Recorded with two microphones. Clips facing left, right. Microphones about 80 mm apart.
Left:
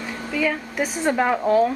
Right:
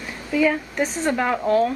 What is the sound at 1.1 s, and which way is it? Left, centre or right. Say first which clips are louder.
Speech: left 2 dB; centre.